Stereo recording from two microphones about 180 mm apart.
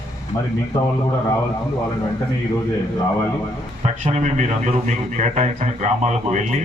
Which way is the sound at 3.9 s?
40° right (ahead or behind).